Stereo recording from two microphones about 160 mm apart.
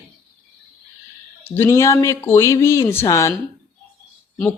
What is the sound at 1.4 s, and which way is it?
Speech, 15° left (ahead or behind).